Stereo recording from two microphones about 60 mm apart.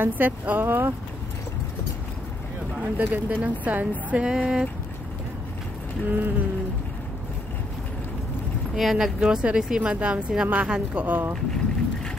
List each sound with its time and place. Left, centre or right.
0.0 s speech: right
3.0 s speech: right
6.0 s speech: right
8.7 s speech: centre; by 11.3 s right